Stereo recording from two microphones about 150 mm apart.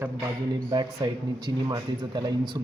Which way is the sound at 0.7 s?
25° right (ahead or behind).